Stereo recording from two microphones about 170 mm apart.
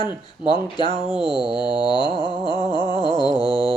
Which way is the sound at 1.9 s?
25° left (ahead or behind).